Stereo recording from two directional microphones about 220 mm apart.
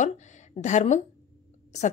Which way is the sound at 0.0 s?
35° left (ahead or behind).